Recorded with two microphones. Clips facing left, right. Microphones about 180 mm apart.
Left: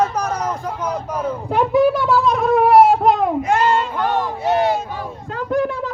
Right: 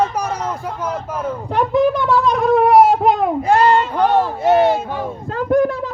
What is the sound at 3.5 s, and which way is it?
Child singing, 35° right (ahead or behind).